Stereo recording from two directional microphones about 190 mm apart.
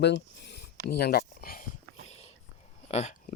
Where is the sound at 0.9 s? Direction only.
55° left (ahead or behind).